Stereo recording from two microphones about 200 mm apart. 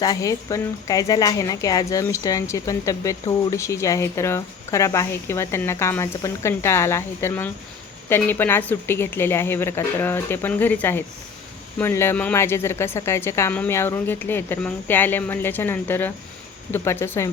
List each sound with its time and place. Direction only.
0.0 s speech: 20° left (ahead or behind)